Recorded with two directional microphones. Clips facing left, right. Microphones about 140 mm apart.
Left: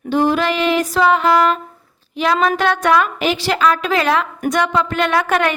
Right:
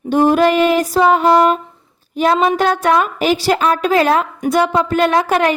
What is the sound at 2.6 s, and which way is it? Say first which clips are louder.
A woman's voice: right 1 dB; 40° right (ahead or behind).